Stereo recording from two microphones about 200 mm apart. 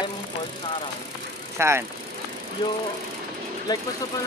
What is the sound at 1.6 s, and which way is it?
Speech, 15° right (ahead or behind).